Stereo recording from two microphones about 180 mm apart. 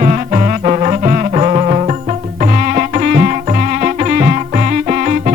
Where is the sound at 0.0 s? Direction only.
40° right (ahead or behind).